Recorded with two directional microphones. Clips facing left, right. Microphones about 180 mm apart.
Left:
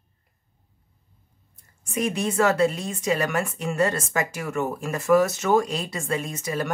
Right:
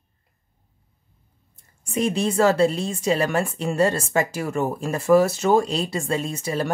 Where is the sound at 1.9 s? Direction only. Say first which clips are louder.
Right 3 dB; 30° right (ahead or behind).